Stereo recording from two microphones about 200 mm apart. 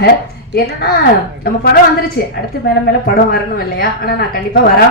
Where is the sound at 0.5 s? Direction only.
50° left (ahead or behind).